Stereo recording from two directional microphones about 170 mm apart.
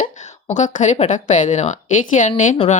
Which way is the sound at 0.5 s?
45° left (ahead or behind).